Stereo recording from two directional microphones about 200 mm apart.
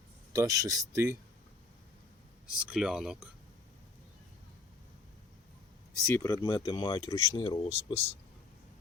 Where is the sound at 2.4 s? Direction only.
5° right (ahead or behind).